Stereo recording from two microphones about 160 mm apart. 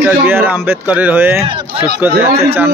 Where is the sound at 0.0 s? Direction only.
15° right (ahead or behind).